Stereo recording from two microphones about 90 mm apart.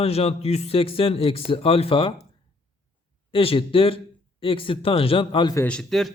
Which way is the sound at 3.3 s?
85° left.